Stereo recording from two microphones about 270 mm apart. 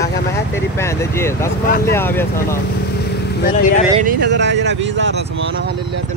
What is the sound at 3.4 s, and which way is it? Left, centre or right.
Speech, left.